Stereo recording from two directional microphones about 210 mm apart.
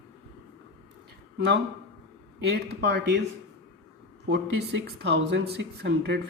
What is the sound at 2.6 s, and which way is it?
Speech, 50° right (ahead or behind).